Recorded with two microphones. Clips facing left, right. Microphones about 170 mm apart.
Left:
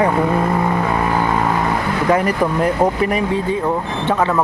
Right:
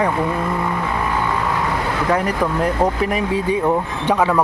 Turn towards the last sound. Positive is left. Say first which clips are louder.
# left 2 dB
turn(degrees=0)  # may be behind; listen again after turning